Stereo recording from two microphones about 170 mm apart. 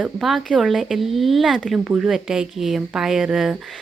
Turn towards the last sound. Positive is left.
turn(degrees=-5)  # may be behind; listen again after turning